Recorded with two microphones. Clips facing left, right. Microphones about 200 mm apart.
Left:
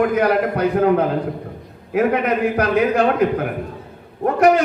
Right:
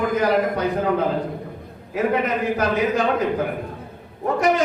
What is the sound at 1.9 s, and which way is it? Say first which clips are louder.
A man's voice: left 4 dB; 60° left (ahead or behind).